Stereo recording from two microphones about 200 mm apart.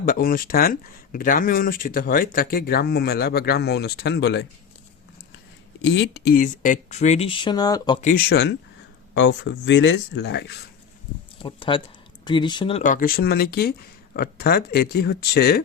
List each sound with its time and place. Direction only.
0.0 s speech: 45° left (ahead or behind)
5.8 s speech: 60° left (ahead or behind); by 7.9 s 20° left (ahead or behind)
8.0 s speech: 50° left (ahead or behind)
9.1 s speech: 65° left (ahead or behind)
11.4 s speech: 25° left (ahead or behind)
12.8 s speech: 40° left (ahead or behind)